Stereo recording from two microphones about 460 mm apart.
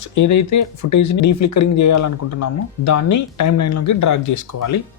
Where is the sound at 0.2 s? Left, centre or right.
Left.